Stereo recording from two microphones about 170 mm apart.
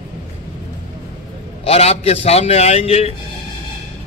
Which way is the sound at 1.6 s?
35° left (ahead or behind).